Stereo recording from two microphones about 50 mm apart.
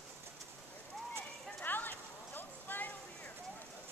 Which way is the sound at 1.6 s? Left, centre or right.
Left.